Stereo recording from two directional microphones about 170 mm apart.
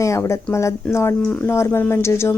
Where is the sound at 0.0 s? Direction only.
15° left (ahead or behind).